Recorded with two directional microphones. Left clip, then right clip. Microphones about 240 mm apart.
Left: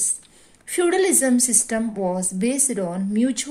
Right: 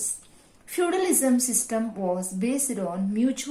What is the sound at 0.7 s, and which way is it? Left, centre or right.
A woman's voice, left.